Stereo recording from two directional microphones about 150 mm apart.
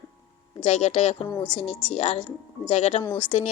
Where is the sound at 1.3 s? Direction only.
15° left (ahead or behind).